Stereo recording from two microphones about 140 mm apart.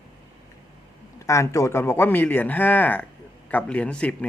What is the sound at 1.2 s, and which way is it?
Speech, 20° left (ahead or behind).